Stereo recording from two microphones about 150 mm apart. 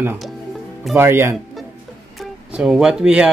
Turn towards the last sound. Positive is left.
turn(degrees=-5)  # may be behind; listen again after turning